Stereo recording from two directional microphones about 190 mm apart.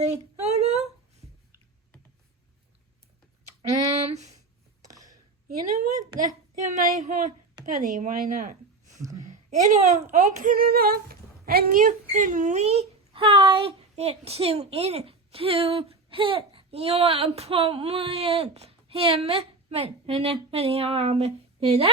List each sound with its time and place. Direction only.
0.0 s a sound: 35° right (ahead or behind)
4.1 s speech: 35° right (ahead or behind)
6.1 s speech: 40° right (ahead or behind)